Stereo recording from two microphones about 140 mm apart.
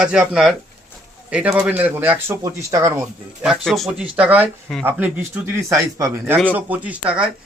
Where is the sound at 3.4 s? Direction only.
Centre (ahead or behind); by 6.3 s 20° right (ahead or behind).